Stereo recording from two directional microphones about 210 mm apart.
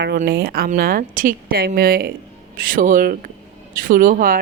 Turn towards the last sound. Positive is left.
turn(degrees=-40)  # may be behind; listen again after turning